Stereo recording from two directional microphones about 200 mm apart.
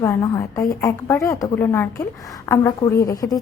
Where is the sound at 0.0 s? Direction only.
15° left (ahead or behind).